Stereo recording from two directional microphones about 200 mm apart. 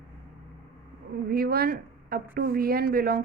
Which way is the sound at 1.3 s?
50° right (ahead or behind).